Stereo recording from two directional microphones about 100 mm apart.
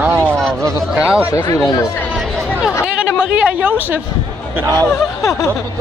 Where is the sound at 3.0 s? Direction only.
10° right (ahead or behind).